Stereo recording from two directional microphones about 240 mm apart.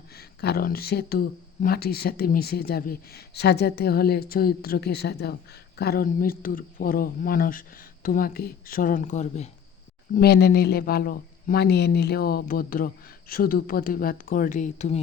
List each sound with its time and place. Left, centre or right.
0.1 s speech: left
10.2 s speech: left